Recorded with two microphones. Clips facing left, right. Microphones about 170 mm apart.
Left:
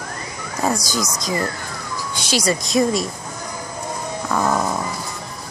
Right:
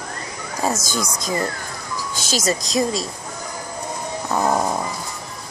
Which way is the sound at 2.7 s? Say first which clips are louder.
Left 5 dB; 35° right (ahead or behind).